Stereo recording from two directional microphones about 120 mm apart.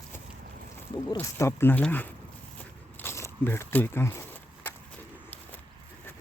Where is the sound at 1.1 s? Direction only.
25° left (ahead or behind).